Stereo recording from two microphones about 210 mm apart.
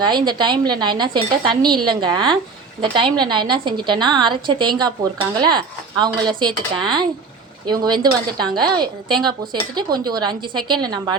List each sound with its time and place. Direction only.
0.0 s speech: 20° right (ahead or behind)